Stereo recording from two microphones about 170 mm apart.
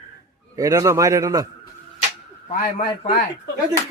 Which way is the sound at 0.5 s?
20° right (ahead or behind).